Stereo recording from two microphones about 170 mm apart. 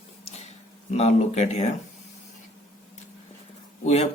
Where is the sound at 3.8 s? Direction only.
40° left (ahead or behind).